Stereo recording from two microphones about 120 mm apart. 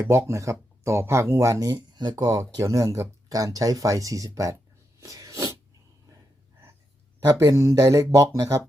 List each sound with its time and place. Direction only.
0.1 s speech: 25° right (ahead or behind)
4.9 s sneeze: 30° right (ahead or behind)
7.2 s speech: 30° right (ahead or behind)